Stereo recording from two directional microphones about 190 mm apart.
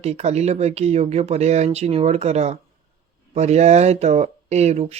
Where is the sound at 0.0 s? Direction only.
35° right (ahead or behind).